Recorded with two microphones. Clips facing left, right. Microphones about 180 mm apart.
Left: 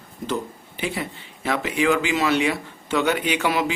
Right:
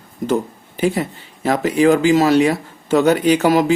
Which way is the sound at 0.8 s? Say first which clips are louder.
Right 9 dB; 40° right (ahead or behind).